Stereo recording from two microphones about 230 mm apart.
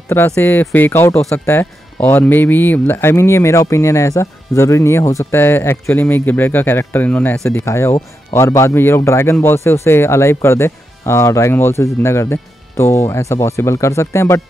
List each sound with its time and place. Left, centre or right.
0.1 s speech: centre